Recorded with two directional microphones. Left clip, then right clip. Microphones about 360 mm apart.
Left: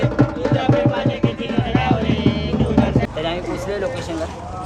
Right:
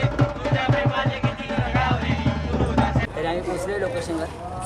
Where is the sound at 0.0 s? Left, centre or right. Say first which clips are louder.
Left 5 dB; centre.